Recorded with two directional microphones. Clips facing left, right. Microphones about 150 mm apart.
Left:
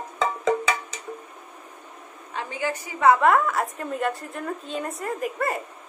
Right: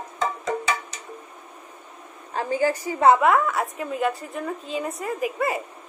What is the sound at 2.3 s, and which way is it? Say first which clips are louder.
Speech: right 6 dB; 40° right (ahead or behind).